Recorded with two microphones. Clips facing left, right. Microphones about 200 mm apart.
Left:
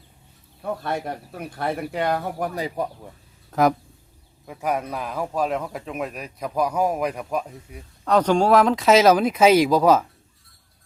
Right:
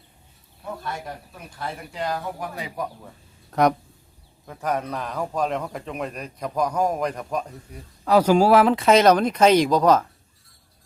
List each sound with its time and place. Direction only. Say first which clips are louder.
0.6 s speech: left 6 dB; 60° left (ahead or behind)
2.6 s speech: left 5 dB; 35° left (ahead or behind)
3.5 s a man's voice: even; centre (ahead or behind)
8.0 s speech: right 2 dB; 5° right (ahead or behind)